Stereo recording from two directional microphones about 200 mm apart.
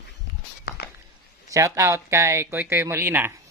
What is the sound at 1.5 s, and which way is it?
Speech, 15° right (ahead or behind).